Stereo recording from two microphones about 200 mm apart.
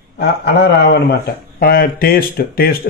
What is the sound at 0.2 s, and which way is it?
A man's voice, 55° left (ahead or behind).